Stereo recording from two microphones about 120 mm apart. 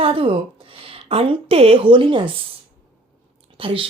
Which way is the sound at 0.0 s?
50° right (ahead or behind).